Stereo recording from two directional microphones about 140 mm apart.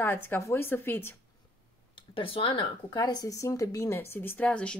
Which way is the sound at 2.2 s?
40° left (ahead or behind).